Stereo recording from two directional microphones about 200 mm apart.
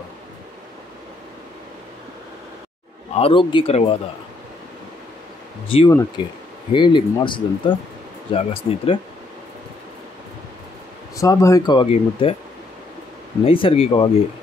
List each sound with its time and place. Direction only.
3.2 s speech: 25° left (ahead or behind)
5.9 s speech: 15° left (ahead or behind)
11.1 s speech: 15° left (ahead or behind)
13.4 s speech: 25° left (ahead or behind)